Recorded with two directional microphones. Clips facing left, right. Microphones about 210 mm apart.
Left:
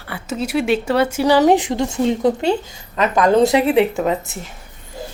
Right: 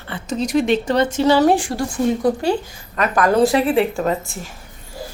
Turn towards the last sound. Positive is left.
turn(degrees=20)  # may be behind; listen again after turning